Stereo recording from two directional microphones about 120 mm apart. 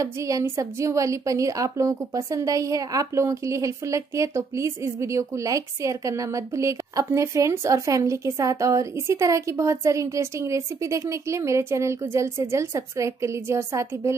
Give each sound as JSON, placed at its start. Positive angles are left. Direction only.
{"t": 0.0, "sound": "a woman's voice", "side_deg": -25}